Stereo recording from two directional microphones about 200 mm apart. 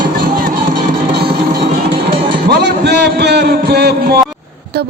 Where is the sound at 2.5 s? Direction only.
55° right (ahead or behind).